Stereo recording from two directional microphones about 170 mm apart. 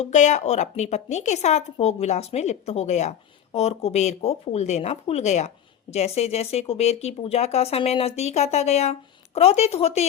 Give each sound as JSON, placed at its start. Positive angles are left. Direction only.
{"t": 0.0, "sound": "a woman's voice", "side_deg": 45}